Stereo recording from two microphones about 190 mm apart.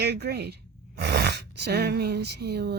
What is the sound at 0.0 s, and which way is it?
Speech, 60° right (ahead or behind).